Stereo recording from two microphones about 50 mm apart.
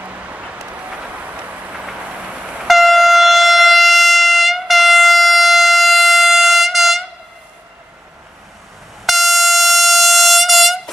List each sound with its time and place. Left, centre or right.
0.0 s vehicle: right
2.6 s civil defense siren: centre
9.0 s train: centre